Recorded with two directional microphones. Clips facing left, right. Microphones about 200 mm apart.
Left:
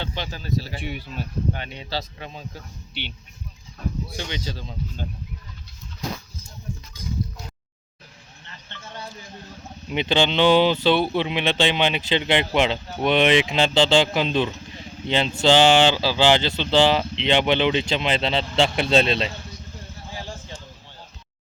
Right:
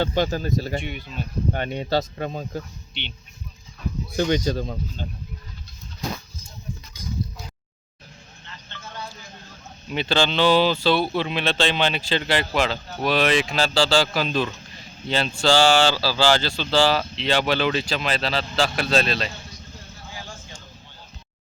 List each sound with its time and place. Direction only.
0.0 s speech: 45° right (ahead or behind)
0.8 s speech: 5° left (ahead or behind)
1.5 s speech: 50° right (ahead or behind)
4.2 s speech: 45° right (ahead or behind)
9.9 s speech: 20° left (ahead or behind)
20.1 s a sound: 35° left (ahead or behind)